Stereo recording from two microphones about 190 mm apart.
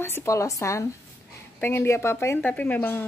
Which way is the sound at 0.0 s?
15° left (ahead or behind).